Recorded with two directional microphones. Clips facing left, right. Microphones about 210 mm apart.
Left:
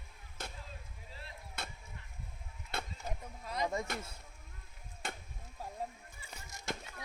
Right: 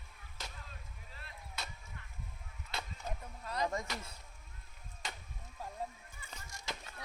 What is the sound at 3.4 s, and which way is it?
Speech, 10° left (ahead or behind).